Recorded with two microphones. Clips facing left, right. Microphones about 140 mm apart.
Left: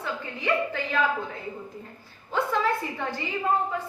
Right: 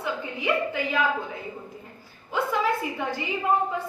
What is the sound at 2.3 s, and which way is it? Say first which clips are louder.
Speech: even; 10° right (ahead or behind).